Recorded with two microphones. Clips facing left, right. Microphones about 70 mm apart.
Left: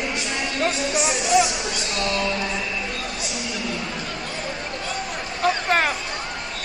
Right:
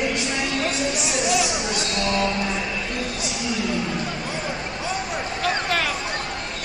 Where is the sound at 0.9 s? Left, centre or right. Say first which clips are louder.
Left 3 dB; left.